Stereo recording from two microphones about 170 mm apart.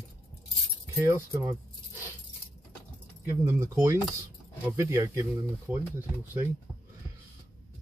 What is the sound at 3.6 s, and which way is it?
Speech, 20° right (ahead or behind).